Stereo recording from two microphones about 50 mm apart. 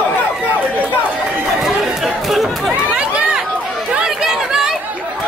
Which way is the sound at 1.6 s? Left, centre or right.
Centre.